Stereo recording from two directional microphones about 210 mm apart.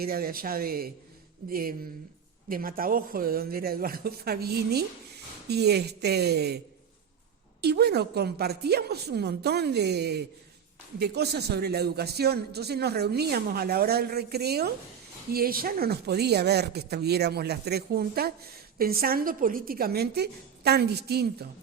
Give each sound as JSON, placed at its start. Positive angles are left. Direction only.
{"t": 0.0, "sound": "a man's voice", "side_deg": -45}
{"t": 7.6, "sound": "a man's voice", "side_deg": -50}